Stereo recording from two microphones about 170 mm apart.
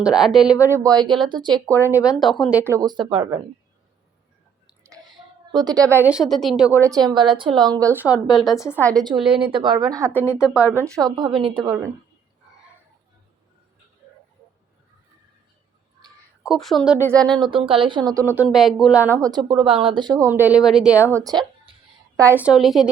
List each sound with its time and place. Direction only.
0.0 s a woman's voice: 5° right (ahead or behind)
0.7 s speech: 20° right (ahead or behind)
2.0 s speech: centre (ahead or behind); by 3.4 s 30° right (ahead or behind)
5.1 s a woman's voice: 25° right (ahead or behind); by 6.7 s centre (ahead or behind)
6.8 s speech: 20° right (ahead or behind)
8.3 s a woman's voice: centre (ahead or behind)
8.6 s a woman's voice: 10° left (ahead or behind)
9.0 s a woman's voice: 25° right (ahead or behind); by 10.6 s 5° right (ahead or behind)
10.7 s speech: 15° right (ahead or behind)
16.4 s a woman's voice: centre (ahead or behind)
17.3 s speech: 30° right (ahead or behind)
18.4 s a woman's voice: centre (ahead or behind)
19.1 s speech: 20° right (ahead or behind)
22.2 s a woman's voice: 10° right (ahead or behind)